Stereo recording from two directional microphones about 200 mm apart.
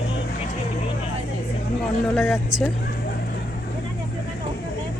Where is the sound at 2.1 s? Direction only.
Centre (ahead or behind).